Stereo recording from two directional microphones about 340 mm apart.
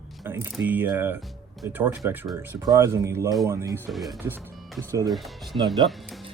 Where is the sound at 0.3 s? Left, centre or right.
Centre.